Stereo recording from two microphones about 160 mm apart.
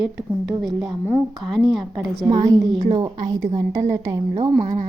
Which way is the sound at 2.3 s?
30° right (ahead or behind).